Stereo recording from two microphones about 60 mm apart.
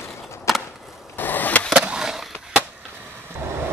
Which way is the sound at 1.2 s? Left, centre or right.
Left.